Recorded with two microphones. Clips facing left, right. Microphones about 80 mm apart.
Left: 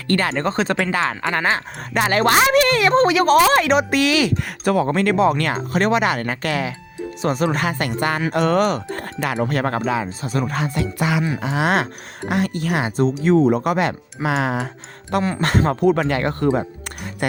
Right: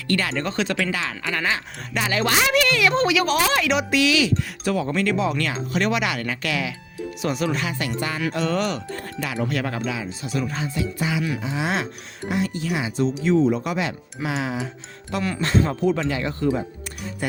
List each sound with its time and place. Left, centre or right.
0.1 s speech: left
10.5 s speech: left